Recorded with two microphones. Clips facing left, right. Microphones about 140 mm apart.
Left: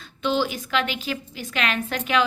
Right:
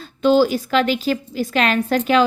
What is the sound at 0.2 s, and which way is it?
A woman's voice, 40° right (ahead or behind).